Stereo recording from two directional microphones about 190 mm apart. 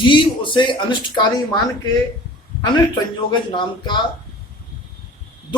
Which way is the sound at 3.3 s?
25° left (ahead or behind).